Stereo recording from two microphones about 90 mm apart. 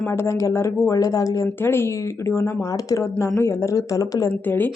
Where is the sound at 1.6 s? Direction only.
25° left (ahead or behind).